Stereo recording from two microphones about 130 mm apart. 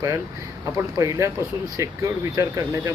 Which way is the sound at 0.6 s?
25° right (ahead or behind).